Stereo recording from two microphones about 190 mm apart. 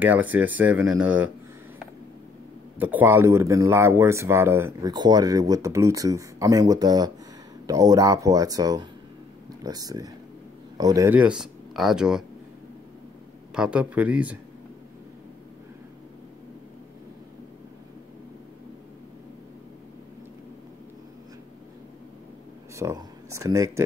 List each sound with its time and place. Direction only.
0.0 s speech: 10° right (ahead or behind)
2.8 s speech: 10° right (ahead or behind)
13.6 s speech: 5° right (ahead or behind)
22.8 s speech: 15° right (ahead or behind)